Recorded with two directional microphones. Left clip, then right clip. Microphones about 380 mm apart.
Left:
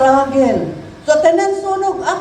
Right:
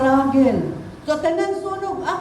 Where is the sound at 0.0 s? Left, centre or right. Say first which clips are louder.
Left 5 dB; centre.